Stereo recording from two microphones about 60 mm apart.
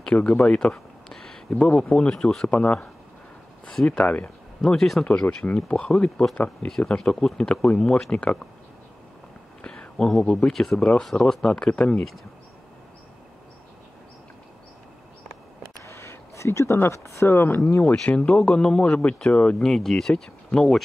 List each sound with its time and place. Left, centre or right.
0.0 s a sound: centre
1.5 s speech: centre
4.0 s speech: left
4.6 s speech: centre
5.0 s speech: left
9.6 s speech: centre
15.8 s a sound: left
16.9 s speech: left
17.3 s speech: left
17.6 s speech: left
17.9 s speech: centre